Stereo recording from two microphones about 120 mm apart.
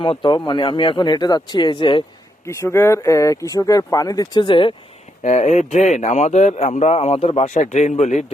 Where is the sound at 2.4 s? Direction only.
25° left (ahead or behind); by 4.7 s 45° left (ahead or behind).